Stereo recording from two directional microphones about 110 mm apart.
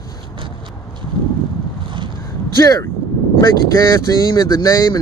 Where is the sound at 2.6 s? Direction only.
35° left (ahead or behind).